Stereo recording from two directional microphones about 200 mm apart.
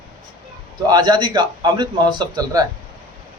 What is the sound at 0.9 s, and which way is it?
A man's voice, 20° right (ahead or behind).